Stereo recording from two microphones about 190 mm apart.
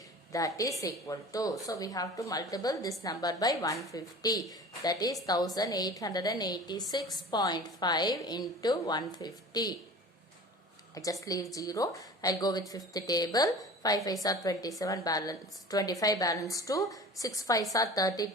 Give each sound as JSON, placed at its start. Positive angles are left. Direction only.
{"t": 0.3, "sound": "a woman's voice", "side_deg": 15}
{"t": 10.9, "sound": "a woman's voice", "side_deg": 20}